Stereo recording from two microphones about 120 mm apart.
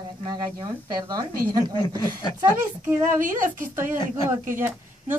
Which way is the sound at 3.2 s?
90° right.